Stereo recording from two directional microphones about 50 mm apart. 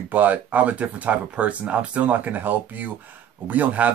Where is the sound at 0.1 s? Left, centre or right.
Right.